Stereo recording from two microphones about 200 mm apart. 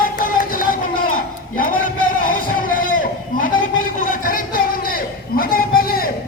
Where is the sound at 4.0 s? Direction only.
45° left (ahead or behind).